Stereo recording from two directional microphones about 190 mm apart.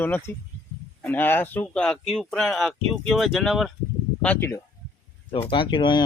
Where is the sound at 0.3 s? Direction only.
10° left (ahead or behind).